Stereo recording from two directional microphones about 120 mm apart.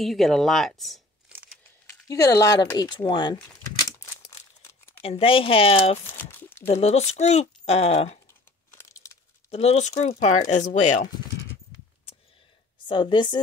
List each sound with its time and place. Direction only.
0.0 s speech: centre (ahead or behind)
1.9 s speech: 30° left (ahead or behind)
4.2 s crumpling: 25° left (ahead or behind)
5.0 s speech: 50° left (ahead or behind)
6.1 s a sound: 15° left (ahead or behind)
6.7 s speech: 65° left (ahead or behind)
8.7 s crumpling: 25° left (ahead or behind)
9.5 s speech: 60° left (ahead or behind)
12.8 s speech: 40° left (ahead or behind)